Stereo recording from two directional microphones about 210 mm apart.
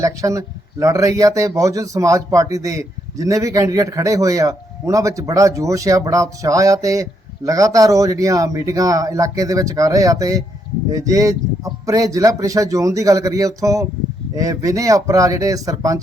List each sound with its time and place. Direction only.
0.0 s a man's voice: 15° right (ahead or behind)